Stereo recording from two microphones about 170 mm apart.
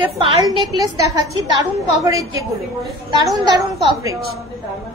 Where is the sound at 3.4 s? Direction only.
20° right (ahead or behind).